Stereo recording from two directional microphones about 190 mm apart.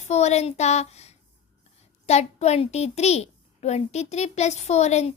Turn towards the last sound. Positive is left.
turn(degrees=35)  # may be behind; listen again after turning